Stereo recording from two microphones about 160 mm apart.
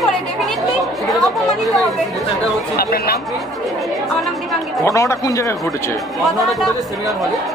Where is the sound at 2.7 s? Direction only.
70° left (ahead or behind).